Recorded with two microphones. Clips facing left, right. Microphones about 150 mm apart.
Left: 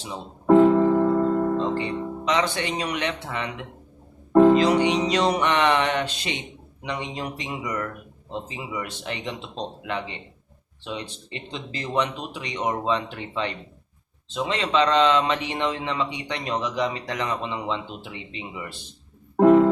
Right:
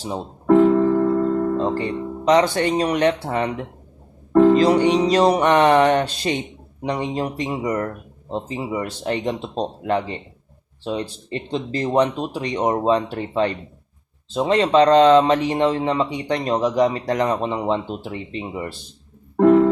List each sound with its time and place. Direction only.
0.4 s music: centre (ahead or behind)
1.5 s speech: 40° right (ahead or behind)
19.4 s music: 5° left (ahead or behind)